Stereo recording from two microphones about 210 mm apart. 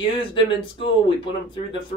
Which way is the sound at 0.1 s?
25° left (ahead or behind).